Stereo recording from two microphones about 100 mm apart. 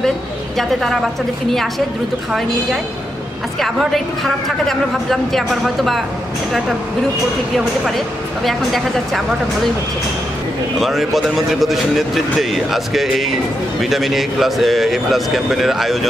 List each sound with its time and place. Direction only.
3.5 s a man's voice: 5° left (ahead or behind)
7.5 s a man's voice: centre (ahead or behind)
10.8 s a man's voice: centre (ahead or behind)